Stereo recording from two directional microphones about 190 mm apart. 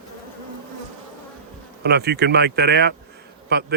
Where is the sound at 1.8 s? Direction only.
60° right (ahead or behind).